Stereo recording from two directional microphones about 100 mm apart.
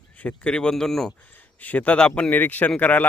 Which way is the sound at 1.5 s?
15° left (ahead or behind).